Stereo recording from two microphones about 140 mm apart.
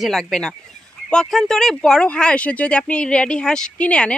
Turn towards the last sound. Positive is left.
turn(degrees=10)  # may be behind; listen again after turning